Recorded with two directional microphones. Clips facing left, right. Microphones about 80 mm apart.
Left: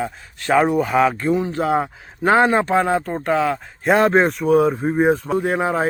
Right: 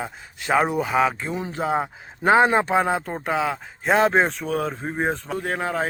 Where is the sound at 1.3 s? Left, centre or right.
Centre.